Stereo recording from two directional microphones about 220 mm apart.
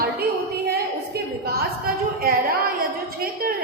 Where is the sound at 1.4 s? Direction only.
45° right (ahead or behind).